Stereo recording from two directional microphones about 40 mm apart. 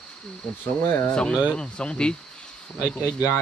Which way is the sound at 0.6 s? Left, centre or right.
Left.